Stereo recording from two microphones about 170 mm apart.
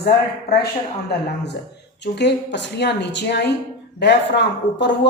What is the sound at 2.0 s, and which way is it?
A woman's voice, 90° left.